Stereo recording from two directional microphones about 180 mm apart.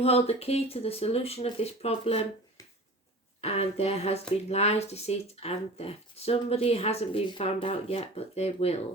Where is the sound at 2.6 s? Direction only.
20° left (ahead or behind).